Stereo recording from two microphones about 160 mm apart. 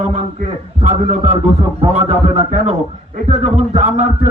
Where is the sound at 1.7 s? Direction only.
45° right (ahead or behind).